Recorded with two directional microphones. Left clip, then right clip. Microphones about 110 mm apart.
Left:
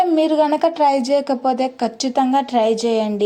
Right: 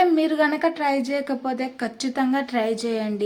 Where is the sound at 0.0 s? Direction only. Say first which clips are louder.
Left 4 dB; 35° left (ahead or behind).